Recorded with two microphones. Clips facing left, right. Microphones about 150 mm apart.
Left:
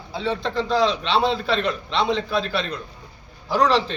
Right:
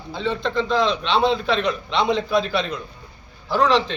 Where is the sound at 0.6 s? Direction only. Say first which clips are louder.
Even; 35° left (ahead or behind).